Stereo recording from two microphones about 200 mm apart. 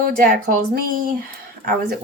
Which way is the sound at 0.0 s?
45° right (ahead or behind).